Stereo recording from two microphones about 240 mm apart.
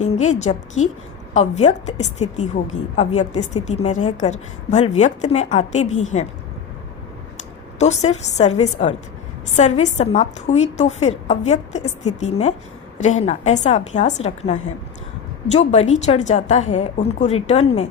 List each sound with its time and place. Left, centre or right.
0.3 s a woman's voice: left
7.8 s a woman's voice: left